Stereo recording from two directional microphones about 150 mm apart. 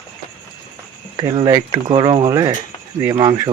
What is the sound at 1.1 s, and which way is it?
Speech, 30° right (ahead or behind).